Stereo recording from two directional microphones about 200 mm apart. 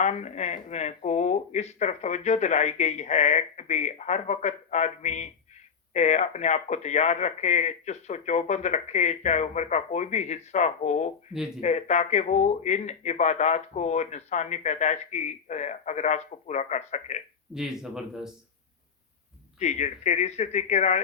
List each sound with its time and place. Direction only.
0.0 s speech: 35° left (ahead or behind)
17.5 s speech: centre (ahead or behind)
19.5 s speech: 35° left (ahead or behind)